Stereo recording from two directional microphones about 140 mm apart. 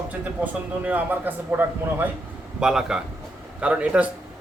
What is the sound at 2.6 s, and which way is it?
A man's voice, 5° right (ahead or behind).